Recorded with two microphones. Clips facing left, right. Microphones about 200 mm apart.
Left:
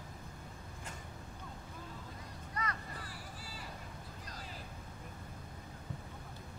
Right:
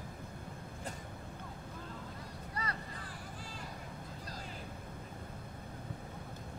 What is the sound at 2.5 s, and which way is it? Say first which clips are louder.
Vehicle: left 1 dB; 30° right (ahead or behind).